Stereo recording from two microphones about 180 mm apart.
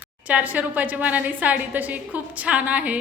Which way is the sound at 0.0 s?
10° right (ahead or behind).